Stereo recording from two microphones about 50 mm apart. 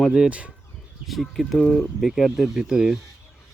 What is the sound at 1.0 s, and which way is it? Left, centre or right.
Speech, centre.